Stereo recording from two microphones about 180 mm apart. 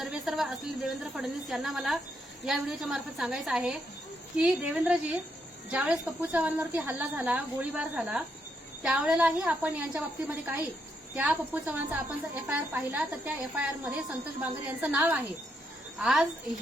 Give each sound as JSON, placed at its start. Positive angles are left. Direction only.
{"t": 0.0, "sound": "a woman's voice", "side_deg": 0}